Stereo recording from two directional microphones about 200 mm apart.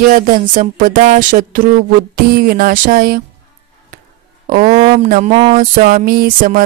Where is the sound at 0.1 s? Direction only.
40° right (ahead or behind).